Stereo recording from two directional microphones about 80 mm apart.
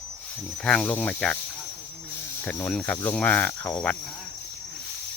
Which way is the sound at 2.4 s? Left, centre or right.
Centre.